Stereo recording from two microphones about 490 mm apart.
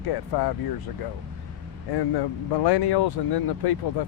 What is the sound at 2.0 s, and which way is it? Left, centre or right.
Speech, left.